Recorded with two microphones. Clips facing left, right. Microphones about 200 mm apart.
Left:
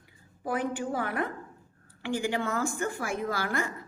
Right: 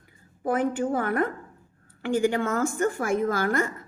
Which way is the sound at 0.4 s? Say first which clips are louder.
Right 6 dB; 50° right (ahead or behind).